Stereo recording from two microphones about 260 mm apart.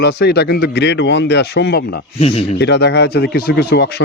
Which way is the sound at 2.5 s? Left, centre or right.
Left.